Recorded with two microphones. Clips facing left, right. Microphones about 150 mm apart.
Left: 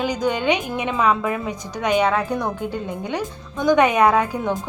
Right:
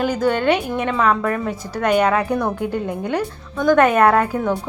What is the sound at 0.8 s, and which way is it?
Speech, 10° left (ahead or behind).